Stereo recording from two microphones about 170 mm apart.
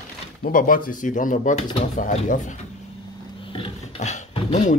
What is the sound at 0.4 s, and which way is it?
Speech, 55° left (ahead or behind).